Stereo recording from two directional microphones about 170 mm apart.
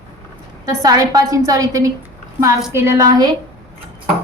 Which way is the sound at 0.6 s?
20° right (ahead or behind).